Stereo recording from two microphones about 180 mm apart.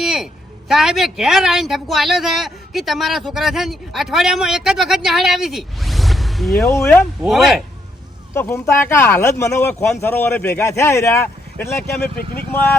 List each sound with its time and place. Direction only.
0.0 s a sound: centre (ahead or behind)
0.7 s speech: centre (ahead or behind)
6.7 s speech: 15° left (ahead or behind)
7.2 s speech: centre (ahead or behind)
8.3 s speech: 15° left (ahead or behind)
12.0 s speech: 55° left (ahead or behind)